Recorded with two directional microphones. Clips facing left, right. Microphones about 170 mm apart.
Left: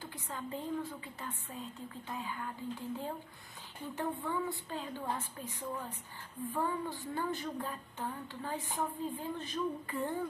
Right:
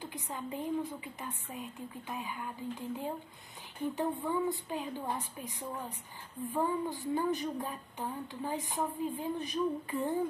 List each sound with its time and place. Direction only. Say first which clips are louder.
0.0 s a woman's voice: right 2 dB; 15° right (ahead or behind)